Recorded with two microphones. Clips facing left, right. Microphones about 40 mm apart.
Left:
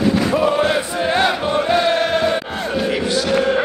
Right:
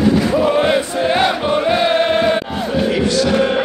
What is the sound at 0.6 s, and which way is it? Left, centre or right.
Chant, centre.